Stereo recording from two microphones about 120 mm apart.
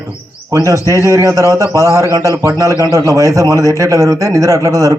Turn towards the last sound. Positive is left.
turn(degrees=-30)  # may be behind; listen again after turning